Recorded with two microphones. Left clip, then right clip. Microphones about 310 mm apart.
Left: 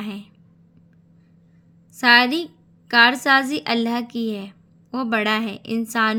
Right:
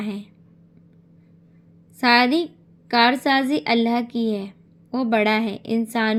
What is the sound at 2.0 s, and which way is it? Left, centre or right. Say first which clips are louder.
A woman's voice: left 2 dB; centre.